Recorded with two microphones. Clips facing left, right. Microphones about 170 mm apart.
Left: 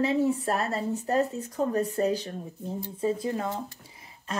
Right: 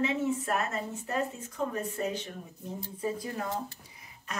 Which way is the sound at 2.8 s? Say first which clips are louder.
Left 6 dB; 25° left (ahead or behind).